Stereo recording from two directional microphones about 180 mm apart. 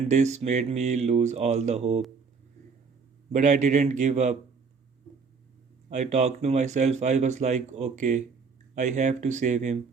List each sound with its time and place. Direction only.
0.1 s speech: 40° right (ahead or behind)
3.3 s speech: 40° right (ahead or behind)
5.9 s speech: 40° right (ahead or behind)